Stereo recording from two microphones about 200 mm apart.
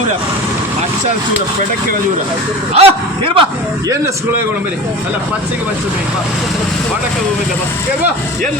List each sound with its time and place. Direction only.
2.7 s speech: 30° right (ahead or behind)